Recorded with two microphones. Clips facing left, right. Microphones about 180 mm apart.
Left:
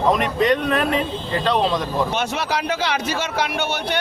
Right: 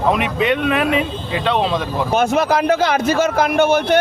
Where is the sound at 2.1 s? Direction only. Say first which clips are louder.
Right 8 dB; 45° right (ahead or behind).